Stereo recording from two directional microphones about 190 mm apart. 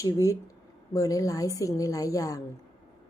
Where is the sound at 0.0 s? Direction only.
15° left (ahead or behind).